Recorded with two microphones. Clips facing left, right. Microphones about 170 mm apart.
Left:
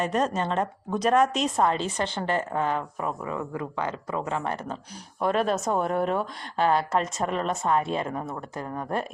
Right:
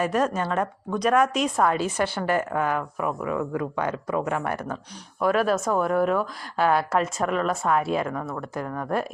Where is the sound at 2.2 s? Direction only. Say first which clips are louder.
Right 1 dB; 25° left (ahead or behind).